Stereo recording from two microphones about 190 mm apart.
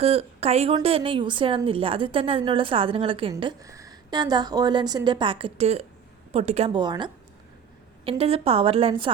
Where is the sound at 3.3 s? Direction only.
15° right (ahead or behind).